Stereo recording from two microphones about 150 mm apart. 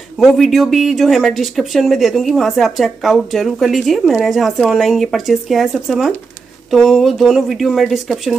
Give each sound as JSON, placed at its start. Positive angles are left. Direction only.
{"t": 0.2, "sound": "speech", "side_deg": 0}